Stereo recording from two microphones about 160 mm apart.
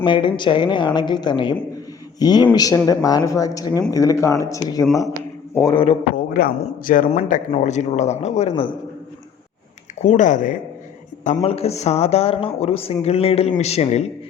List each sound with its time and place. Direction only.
0.0 s speech: 30° left (ahead or behind)
5.7 s speech: 35° left (ahead or behind)
6.3 s a man's voice: 65° left (ahead or behind); by 8.7 s 40° left (ahead or behind)
10.0 s a man's voice: 50° left (ahead or behind)
11.4 s speech: 40° left (ahead or behind)